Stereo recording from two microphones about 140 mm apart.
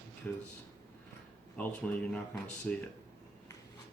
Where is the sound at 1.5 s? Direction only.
10° left (ahead or behind).